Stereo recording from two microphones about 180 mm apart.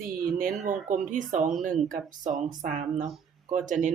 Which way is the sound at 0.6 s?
45° right (ahead or behind).